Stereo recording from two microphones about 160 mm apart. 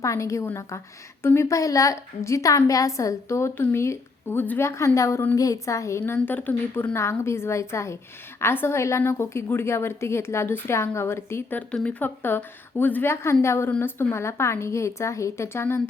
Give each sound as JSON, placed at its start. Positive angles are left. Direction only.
{"t": 0.0, "sound": "a woman's voice", "side_deg": 20}